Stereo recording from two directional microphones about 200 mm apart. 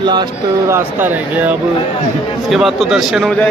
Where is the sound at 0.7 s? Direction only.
10° right (ahead or behind).